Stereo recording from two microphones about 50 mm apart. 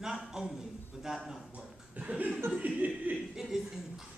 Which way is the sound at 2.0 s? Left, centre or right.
Right.